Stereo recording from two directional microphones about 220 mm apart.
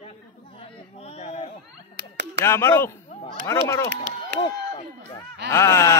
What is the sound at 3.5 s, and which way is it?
Wail, 10° left (ahead or behind).